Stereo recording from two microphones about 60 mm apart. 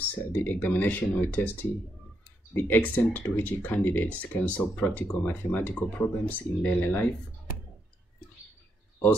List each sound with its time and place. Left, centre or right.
0.1 s speech: left
2.8 s speech: left
4.2 s speech: left